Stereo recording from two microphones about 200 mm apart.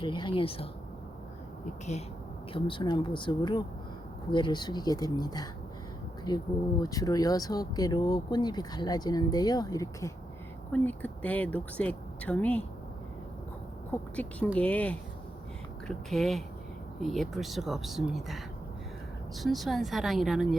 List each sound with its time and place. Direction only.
0.0 s speech: 25° left (ahead or behind)
2.5 s speech: 25° left (ahead or behind); by 12.6 s 5° left (ahead or behind)
13.9 s speech: 5° left (ahead or behind)